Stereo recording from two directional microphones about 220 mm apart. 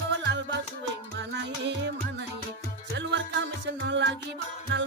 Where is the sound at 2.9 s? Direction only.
55° right (ahead or behind).